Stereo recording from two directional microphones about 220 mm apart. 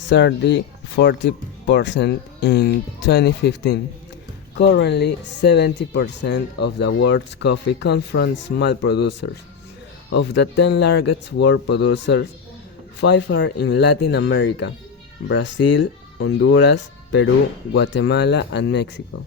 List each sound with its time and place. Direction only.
0.1 s speech: 55° left (ahead or behind)